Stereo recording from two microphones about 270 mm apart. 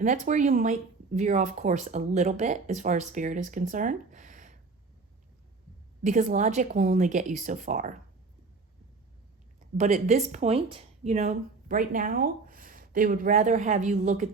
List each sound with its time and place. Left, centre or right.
0.0 s speech: right
6.0 s speech: right
9.7 s speech: right